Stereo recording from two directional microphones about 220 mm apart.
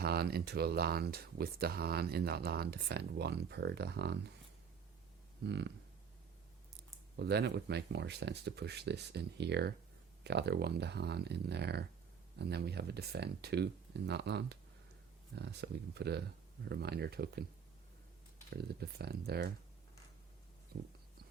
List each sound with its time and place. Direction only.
0.0 s speech: 45° right (ahead or behind)
5.5 s speech: 50° right (ahead or behind)
7.2 s speech: 50° right (ahead or behind)
18.5 s speech: 45° right (ahead or behind)